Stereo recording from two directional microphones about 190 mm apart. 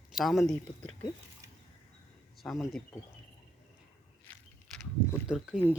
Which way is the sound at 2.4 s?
Centre (ahead or behind).